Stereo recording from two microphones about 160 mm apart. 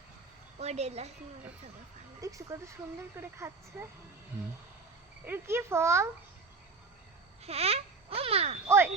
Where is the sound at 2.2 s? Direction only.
20° right (ahead or behind).